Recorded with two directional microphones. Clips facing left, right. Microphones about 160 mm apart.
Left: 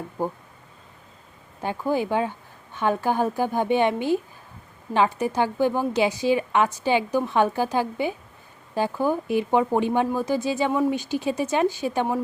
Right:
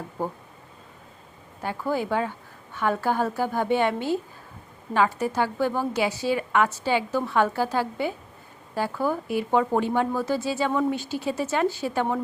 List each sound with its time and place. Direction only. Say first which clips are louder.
0.2 s a woman's voice: left 2 dB; 10° left (ahead or behind)
1.6 s a woman's voice: left 2 dB; 15° left (ahead or behind)